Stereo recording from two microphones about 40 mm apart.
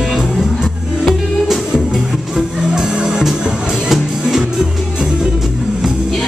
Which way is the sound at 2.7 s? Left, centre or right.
Centre.